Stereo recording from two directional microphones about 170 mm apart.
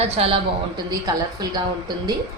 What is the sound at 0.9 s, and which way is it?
Speech, 20° right (ahead or behind).